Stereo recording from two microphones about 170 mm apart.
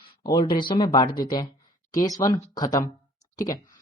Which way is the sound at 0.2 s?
25° left (ahead or behind).